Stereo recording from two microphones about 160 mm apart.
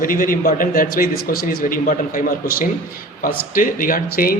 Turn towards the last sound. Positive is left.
turn(degrees=65)  # may be behind; listen again after turning